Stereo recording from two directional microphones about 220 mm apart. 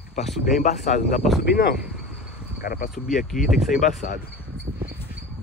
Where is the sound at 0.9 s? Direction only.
35° left (ahead or behind).